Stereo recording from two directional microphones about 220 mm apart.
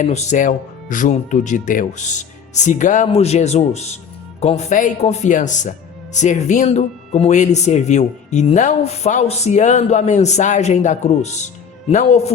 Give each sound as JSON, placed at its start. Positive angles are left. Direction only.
{"t": 0.0, "sound": "speech", "side_deg": 30}